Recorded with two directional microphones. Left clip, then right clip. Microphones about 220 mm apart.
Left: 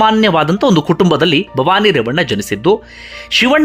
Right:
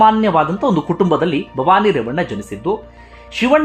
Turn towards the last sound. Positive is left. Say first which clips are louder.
# left 3 dB
turn(degrees=15)  # may be behind; listen again after turning